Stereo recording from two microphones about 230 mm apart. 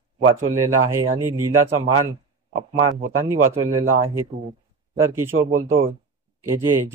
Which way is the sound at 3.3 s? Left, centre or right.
Centre.